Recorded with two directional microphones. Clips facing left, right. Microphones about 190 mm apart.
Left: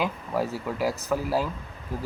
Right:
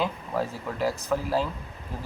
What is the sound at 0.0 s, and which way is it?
Speech, 10° left (ahead or behind).